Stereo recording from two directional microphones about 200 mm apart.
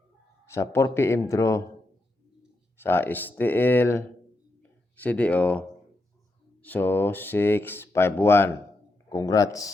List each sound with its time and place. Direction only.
0.5 s speech: 15° left (ahead or behind)
2.8 s speech: 10° left (ahead or behind)
5.0 s speech: 5° left (ahead or behind)